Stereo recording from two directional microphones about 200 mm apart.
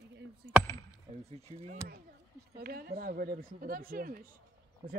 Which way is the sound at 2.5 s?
50° right (ahead or behind).